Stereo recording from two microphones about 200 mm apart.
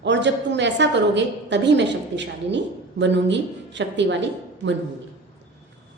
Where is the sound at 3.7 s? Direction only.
65° right (ahead or behind).